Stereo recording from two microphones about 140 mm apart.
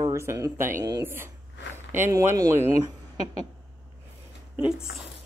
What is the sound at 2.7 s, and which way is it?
Speech, 50° left (ahead or behind).